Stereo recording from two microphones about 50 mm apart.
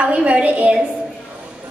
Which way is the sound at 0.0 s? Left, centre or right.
Right.